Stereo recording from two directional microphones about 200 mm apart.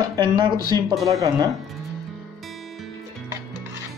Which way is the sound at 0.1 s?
20° right (ahead or behind).